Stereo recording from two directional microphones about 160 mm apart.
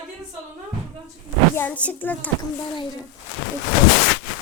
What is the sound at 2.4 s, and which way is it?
Speech, 30° left (ahead or behind).